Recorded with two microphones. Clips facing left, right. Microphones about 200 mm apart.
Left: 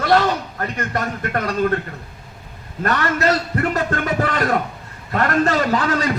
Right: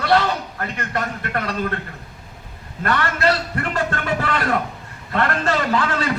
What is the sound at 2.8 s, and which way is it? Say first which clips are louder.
A man's voice: left 1 dB; 40° left (ahead or behind).